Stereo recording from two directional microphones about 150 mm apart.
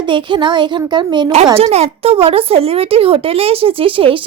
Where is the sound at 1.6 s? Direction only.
45° right (ahead or behind).